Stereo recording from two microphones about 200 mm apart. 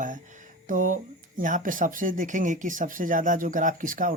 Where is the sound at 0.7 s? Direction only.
40° right (ahead or behind).